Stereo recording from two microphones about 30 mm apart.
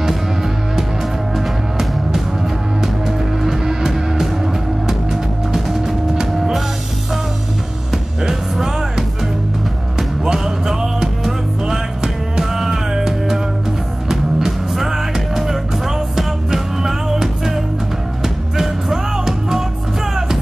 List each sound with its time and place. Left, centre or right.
0.0 s music: centre
8.2 s music: centre